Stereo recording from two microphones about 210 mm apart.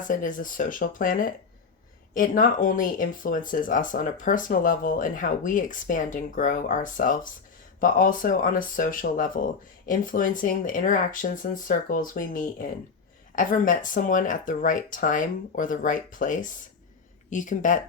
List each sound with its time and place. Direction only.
0.0 s speech: 40° left (ahead or behind)